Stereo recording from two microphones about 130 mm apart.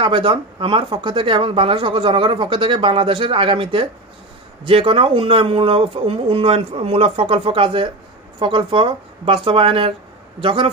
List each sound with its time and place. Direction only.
0.0 s speech: 40° right (ahead or behind)